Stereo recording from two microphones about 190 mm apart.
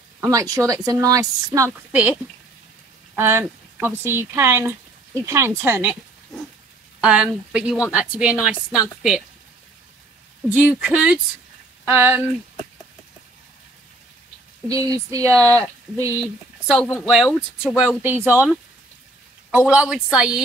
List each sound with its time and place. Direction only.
0.2 s a woman's voice: 15° right (ahead or behind)
3.2 s a woman's voice: 10° right (ahead or behind)
7.0 s a woman's voice: 5° right (ahead or behind)
10.5 s a woman's voice: 5° right (ahead or behind)
14.7 s a woman's voice: 20° right (ahead or behind)
16.6 s a woman's voice: 5° right (ahead or behind)
19.5 s a woman's voice: 5° right (ahead or behind)